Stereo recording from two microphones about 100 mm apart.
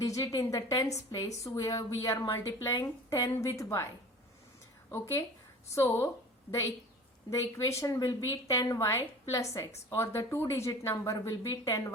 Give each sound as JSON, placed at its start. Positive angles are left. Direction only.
{"t": 0.0, "sound": "a woman's voice", "side_deg": 35}
{"t": 4.9, "sound": "a woman's voice", "side_deg": 25}
{"t": 7.3, "sound": "a woman's voice", "side_deg": 30}